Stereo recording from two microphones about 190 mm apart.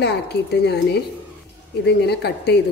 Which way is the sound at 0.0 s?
60° left (ahead or behind).